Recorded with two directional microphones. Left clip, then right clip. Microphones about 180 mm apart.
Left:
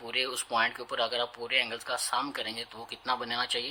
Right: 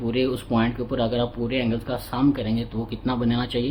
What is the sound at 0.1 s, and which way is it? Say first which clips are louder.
Speech: right 5 dB; 30° left (ahead or behind).